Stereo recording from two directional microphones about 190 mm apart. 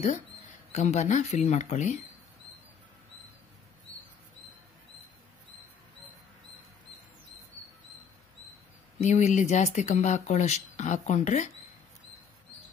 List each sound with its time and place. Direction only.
0.7 s speech: 40° left (ahead or behind)
9.0 s speech: 40° left (ahead or behind)